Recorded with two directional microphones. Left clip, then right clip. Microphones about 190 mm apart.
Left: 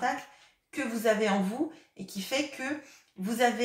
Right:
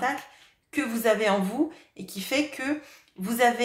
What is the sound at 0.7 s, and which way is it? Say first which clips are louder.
A woman's voice: right 4 dB; 45° right (ahead or behind).